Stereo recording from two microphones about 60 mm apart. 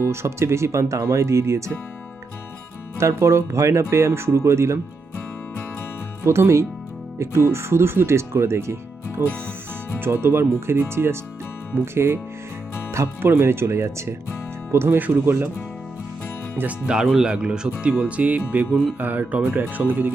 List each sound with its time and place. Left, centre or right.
0.0 s speech: right
3.0 s speech: right
6.2 s speech: right
13.2 s speech: right
16.6 s speech: centre
17.9 s speech: right